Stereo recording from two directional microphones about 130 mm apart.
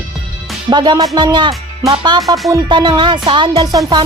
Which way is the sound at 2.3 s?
25° right (ahead or behind).